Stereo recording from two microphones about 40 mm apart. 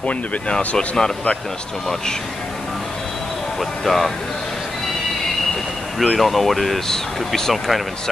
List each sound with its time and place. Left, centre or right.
0.0 s speech: left
0.7 s speech: centre
3.8 s speech: centre
5.9 s speech: centre